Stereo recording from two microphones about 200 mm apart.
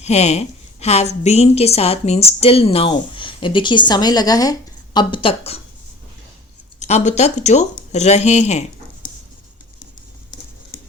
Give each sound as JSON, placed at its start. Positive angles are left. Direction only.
{"t": 0.0, "sound": "a woman's voice", "side_deg": 35}
{"t": 6.7, "sound": "speech", "side_deg": 35}